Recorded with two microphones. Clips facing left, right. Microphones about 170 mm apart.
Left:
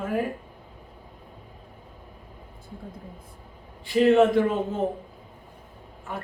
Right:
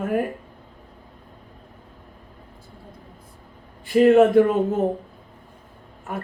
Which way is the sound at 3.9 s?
50° right (ahead or behind).